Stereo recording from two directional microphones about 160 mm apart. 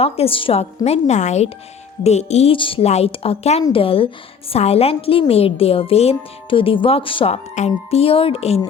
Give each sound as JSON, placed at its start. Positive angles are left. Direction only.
{"t": 0.0, "sound": "a woman's voice", "side_deg": 35}